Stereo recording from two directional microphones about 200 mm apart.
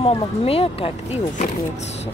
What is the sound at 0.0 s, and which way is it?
Speech, 30° left (ahead or behind).